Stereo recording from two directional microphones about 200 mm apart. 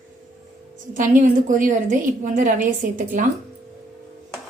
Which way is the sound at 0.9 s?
40° right (ahead or behind).